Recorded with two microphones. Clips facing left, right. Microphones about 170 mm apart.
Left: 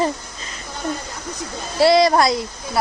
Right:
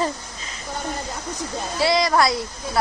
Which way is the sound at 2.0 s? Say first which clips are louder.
Left 4 dB; 25° left (ahead or behind).